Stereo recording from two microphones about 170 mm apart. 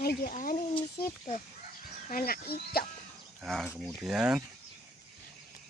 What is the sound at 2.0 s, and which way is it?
Speech, 60° left (ahead or behind).